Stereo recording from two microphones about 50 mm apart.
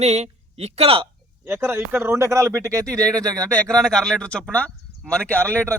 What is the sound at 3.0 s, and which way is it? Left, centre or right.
Speech, centre.